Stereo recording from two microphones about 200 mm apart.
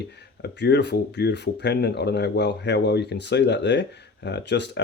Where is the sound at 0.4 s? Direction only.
60° left (ahead or behind).